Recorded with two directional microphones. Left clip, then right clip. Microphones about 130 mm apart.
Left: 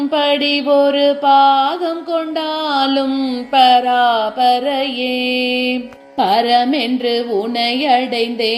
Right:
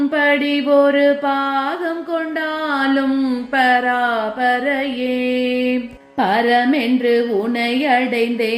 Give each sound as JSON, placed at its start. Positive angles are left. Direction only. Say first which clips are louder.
{"t": 0.2, "sound": "mantra", "louder": "left 1 dB", "side_deg": 20}
{"t": 2.7, "sound": "mantra", "louder": "left 3 dB", "side_deg": 20}
{"t": 3.5, "sound": "speech", "louder": "left 5 dB", "side_deg": 15}
{"t": 6.1, "sound": "mantra", "louder": "left 2 dB", "side_deg": 20}